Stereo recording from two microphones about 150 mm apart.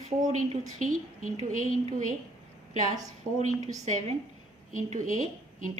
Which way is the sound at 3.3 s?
50° right (ahead or behind).